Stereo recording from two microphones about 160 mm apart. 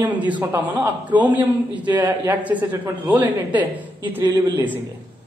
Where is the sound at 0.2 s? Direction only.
10° right (ahead or behind).